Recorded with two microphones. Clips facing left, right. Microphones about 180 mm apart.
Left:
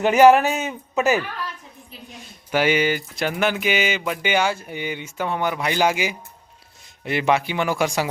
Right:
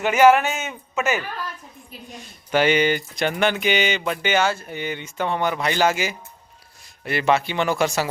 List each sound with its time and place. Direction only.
0.0 s speech: 35° left (ahead or behind)
2.5 s speech: 5° left (ahead or behind)